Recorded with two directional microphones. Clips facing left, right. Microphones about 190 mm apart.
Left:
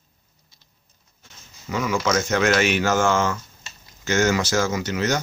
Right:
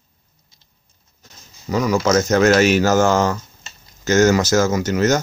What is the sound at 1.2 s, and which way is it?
Speech, 40° right (ahead or behind).